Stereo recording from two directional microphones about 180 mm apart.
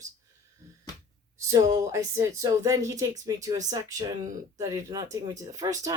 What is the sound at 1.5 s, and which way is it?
A woman's voice, 20° right (ahead or behind).